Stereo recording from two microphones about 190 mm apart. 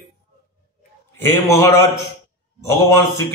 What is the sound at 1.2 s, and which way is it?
A man's voice, 15° left (ahead or behind).